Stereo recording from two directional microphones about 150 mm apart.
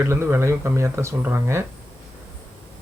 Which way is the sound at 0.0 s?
15° right (ahead or behind).